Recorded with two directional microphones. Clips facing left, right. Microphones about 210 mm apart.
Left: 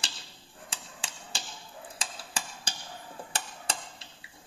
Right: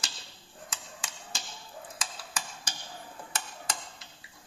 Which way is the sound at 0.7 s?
30° left (ahead or behind).